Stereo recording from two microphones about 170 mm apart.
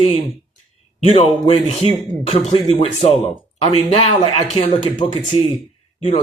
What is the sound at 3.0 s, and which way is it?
Speech, 35° left (ahead or behind).